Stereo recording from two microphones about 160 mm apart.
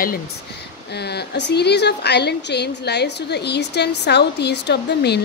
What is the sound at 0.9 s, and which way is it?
Speech, 90° left.